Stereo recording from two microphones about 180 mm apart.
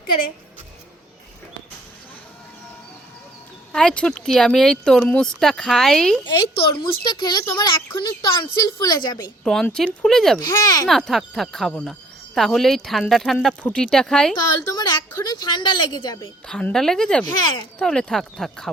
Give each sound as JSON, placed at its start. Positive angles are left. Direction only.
{"t": 3.7, "sound": "speech", "side_deg": 5}
{"t": 7.0, "sound": "a woman's voice", "side_deg": 25}
{"t": 9.4, "sound": "speech", "side_deg": 5}
{"t": 10.4, "sound": "a woman's voice", "side_deg": 20}
{"t": 10.8, "sound": "speech", "side_deg": 0}
{"t": 14.7, "sound": "a woman's voice", "side_deg": 20}
{"t": 16.5, "sound": "speech", "side_deg": 5}
{"t": 17.2, "sound": "a woman's voice", "side_deg": 25}
{"t": 17.7, "sound": "speech", "side_deg": 5}